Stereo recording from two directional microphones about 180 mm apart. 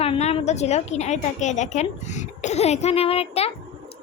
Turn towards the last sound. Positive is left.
turn(degrees=35)  # may be behind; listen again after turning